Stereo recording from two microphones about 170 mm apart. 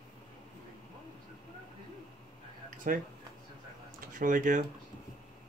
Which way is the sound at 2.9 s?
55° right (ahead or behind).